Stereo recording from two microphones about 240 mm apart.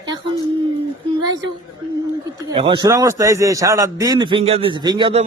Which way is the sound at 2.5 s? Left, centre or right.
Right.